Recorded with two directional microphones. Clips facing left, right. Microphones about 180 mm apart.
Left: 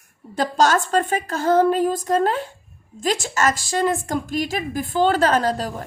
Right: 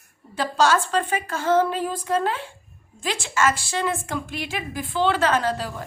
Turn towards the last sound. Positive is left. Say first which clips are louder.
# left 3 dB
turn(degrees=45)  # may be behind; listen again after turning